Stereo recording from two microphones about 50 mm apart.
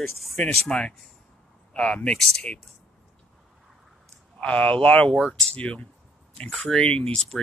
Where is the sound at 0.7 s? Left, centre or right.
Centre.